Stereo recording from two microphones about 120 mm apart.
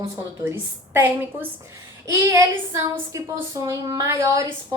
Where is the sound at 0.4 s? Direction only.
15° right (ahead or behind).